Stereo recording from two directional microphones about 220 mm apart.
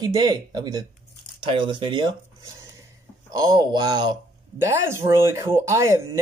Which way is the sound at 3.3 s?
15° right (ahead or behind).